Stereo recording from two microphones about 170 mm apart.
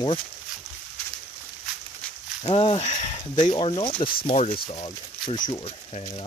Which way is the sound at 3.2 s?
25° left (ahead or behind).